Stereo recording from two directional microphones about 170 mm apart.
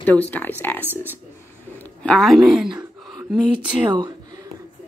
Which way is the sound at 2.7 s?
5° right (ahead or behind).